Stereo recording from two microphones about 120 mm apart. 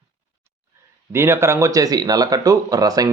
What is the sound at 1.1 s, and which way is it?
A man's voice, 20° right (ahead or behind).